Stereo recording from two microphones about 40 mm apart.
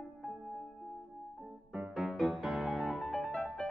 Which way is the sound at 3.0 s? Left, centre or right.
Centre.